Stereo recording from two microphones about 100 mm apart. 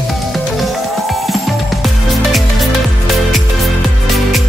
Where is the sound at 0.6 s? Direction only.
Centre (ahead or behind).